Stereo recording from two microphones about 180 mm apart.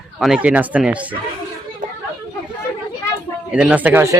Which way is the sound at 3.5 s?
5° right (ahead or behind).